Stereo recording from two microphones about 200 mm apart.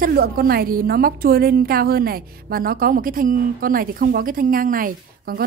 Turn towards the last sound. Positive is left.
turn(degrees=-45)  # may be behind; listen again after turning